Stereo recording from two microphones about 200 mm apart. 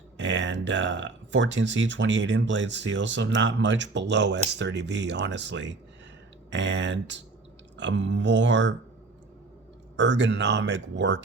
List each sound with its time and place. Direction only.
0.2 s speech: 65° right (ahead or behind)
10.0 s speech: 60° right (ahead or behind)